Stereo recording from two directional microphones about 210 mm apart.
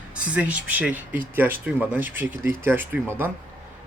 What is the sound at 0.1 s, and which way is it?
Speech, 5° right (ahead or behind).